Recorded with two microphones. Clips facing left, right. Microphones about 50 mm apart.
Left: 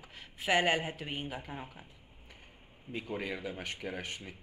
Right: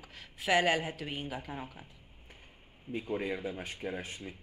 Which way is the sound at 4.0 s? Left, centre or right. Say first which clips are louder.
Left 1 dB; left.